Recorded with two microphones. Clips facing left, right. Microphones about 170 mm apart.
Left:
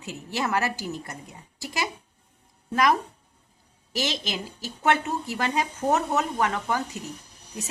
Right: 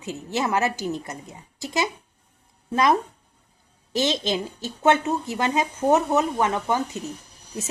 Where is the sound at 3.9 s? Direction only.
25° right (ahead or behind).